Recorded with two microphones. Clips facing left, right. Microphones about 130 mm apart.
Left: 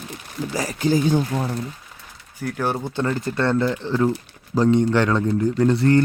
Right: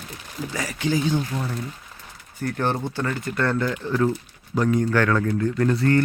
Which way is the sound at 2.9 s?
20° left (ahead or behind).